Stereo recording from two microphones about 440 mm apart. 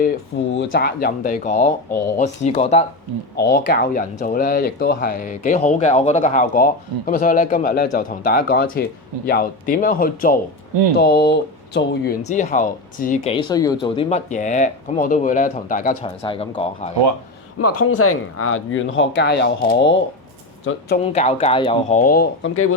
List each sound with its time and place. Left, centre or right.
0.7 s speech: left
17.6 s speech: left
21.0 s speech: centre